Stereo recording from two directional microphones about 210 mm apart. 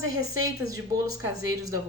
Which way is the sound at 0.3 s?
15° right (ahead or behind).